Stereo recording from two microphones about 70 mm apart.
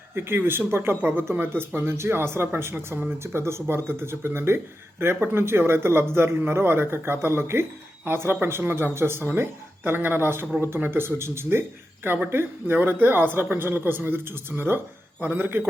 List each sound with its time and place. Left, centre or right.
0.1 s speech: right